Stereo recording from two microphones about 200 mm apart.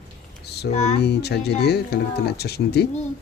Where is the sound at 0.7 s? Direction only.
35° left (ahead or behind).